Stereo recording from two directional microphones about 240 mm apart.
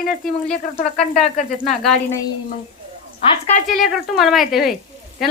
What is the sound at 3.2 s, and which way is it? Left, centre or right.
Speech, left.